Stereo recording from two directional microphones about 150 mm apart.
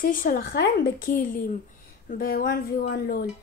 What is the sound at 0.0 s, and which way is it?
A woman's voice, 65° left (ahead or behind).